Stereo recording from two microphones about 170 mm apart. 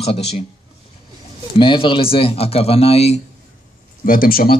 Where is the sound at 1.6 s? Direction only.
30° left (ahead or behind).